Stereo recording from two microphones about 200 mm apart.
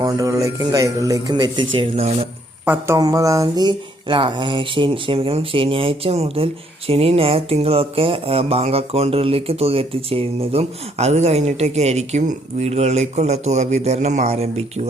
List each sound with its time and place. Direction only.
0.0 s speech: 15° right (ahead or behind)
2.6 s speech: 15° right (ahead or behind); by 14.8 s 30° right (ahead or behind)